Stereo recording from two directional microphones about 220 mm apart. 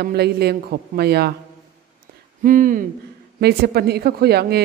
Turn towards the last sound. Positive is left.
turn(degrees=-45)  # may be behind; listen again after turning